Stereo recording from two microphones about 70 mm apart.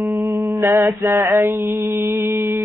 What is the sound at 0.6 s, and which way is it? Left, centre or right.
Mantra, right.